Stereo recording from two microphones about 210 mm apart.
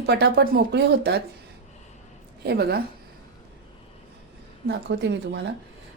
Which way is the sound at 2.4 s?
50° right (ahead or behind).